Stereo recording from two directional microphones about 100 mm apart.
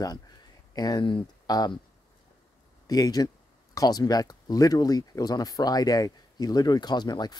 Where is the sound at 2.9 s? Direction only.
40° left (ahead or behind).